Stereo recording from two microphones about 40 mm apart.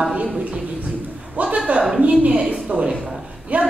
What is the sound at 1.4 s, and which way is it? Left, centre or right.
Speech, right.